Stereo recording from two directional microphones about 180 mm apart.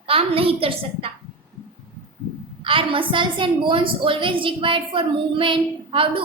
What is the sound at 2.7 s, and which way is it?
A woman's voice, 30° right (ahead or behind).